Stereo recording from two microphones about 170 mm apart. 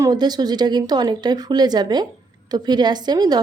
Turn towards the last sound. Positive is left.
turn(degrees=-25)  # may be behind; listen again after turning